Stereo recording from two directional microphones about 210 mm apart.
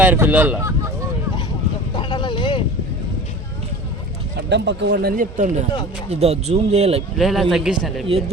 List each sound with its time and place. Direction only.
0.0 s speech: 10° right (ahead or behind)
2.0 s a sound: 20° left (ahead or behind)
4.4 s speech: 60° right (ahead or behind); by 5.5 s 40° right (ahead or behind)
6.1 s speech: 30° right (ahead or behind)
7.2 s a man's voice: centre (ahead or behind)